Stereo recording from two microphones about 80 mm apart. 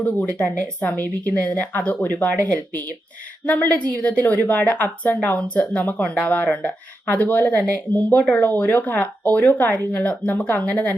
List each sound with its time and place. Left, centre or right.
0.0 s speech: centre